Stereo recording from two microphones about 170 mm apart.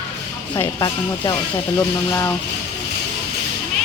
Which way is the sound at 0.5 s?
25° left (ahead or behind).